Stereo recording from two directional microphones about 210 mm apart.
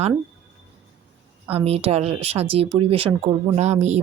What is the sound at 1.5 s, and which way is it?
Speech, 30° right (ahead or behind).